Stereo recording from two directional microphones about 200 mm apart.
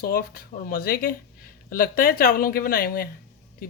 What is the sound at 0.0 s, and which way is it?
Speech, 50° left (ahead or behind).